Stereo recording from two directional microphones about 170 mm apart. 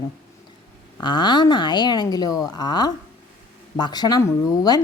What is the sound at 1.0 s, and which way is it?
Speech, 25° left (ahead or behind).